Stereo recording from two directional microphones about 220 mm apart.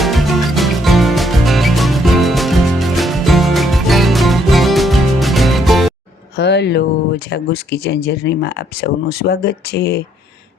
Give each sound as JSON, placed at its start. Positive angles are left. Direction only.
{"t": 0.0, "sound": "music", "side_deg": 0}
{"t": 6.3, "sound": "speech", "side_deg": 50}